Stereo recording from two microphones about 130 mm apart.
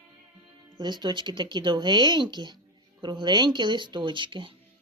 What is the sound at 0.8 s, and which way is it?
Speech, 35° right (ahead or behind).